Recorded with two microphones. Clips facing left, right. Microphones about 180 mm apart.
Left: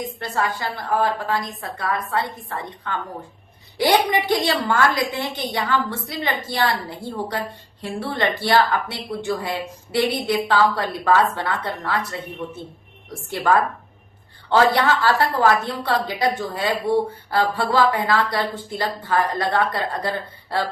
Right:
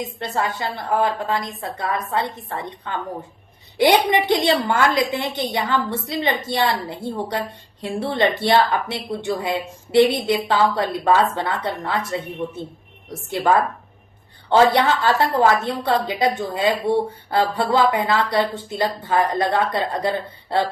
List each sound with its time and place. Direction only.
0.2 s a woman's voice: 25° right (ahead or behind)